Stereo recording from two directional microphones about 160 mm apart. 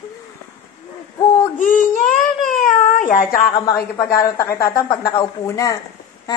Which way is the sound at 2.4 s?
50° left (ahead or behind).